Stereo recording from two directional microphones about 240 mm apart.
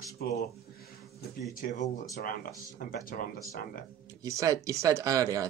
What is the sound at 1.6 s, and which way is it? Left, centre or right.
Speech, left.